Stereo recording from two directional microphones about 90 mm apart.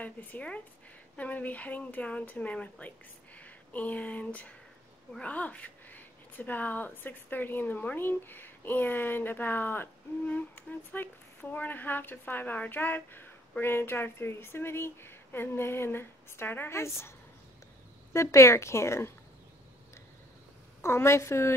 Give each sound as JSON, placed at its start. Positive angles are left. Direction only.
{"t": 0.0, "sound": "speech", "side_deg": 20}
{"t": 18.1, "sound": "speech", "side_deg": 30}
{"t": 20.8, "sound": "speech", "side_deg": 30}